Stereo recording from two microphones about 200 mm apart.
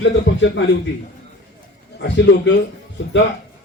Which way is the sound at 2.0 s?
60° left (ahead or behind).